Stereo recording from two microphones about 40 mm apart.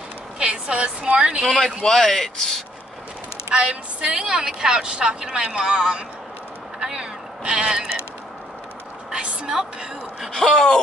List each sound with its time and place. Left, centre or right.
0.4 s speech: right
1.8 s speech: centre
3.4 s speech: right
6.8 s a sound: right
9.1 s a woman's voice: right
10.3 s speech: centre